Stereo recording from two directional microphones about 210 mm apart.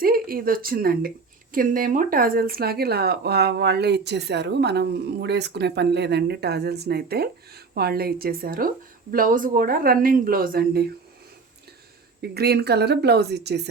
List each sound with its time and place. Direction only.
0.0 s speech: 45° right (ahead or behind)
12.2 s speech: 50° right (ahead or behind)